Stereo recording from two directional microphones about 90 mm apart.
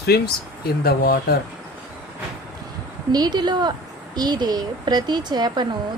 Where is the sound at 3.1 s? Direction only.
50° right (ahead or behind).